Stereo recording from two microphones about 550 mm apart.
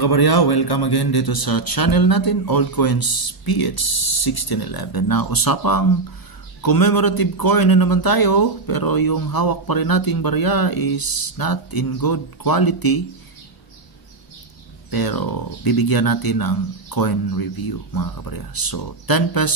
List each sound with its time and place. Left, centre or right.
0.0 s speech: left
14.9 s speech: left